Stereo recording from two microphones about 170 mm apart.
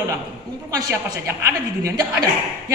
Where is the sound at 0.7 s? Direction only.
20° right (ahead or behind).